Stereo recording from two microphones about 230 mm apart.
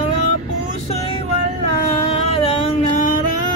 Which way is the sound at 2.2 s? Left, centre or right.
Left.